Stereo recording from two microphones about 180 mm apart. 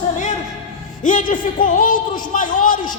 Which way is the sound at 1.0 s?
45° left (ahead or behind).